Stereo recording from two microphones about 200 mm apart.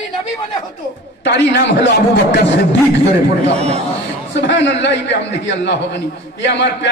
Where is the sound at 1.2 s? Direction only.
60° left (ahead or behind).